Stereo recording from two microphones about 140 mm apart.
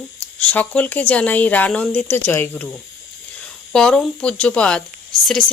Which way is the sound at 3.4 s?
5° left (ahead or behind).